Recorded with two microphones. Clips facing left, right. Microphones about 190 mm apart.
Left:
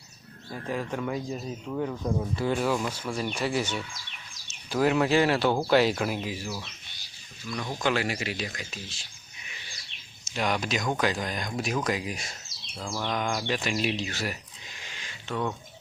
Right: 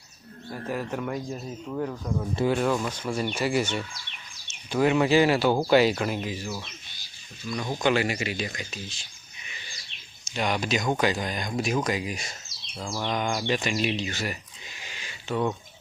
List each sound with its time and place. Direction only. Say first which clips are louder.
0.7 s speech: even; 5° right (ahead or behind)
12.7 s bird: right 1 dB; 5° right (ahead or behind)
13.1 s speech: right 2 dB; centre (ahead or behind)